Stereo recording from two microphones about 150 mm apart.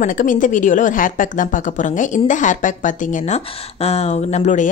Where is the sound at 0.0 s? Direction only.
60° left (ahead or behind).